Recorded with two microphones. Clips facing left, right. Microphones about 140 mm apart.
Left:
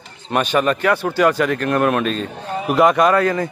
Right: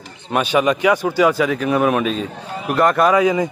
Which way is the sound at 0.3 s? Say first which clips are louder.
Right 1 dB; 10° right (ahead or behind).